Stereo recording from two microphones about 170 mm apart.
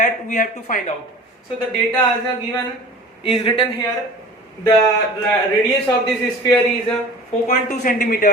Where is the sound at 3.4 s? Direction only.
30° left (ahead or behind).